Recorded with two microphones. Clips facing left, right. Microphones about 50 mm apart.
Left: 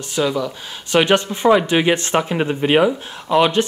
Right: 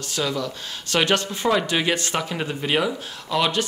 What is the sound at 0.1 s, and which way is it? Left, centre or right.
Speech, centre.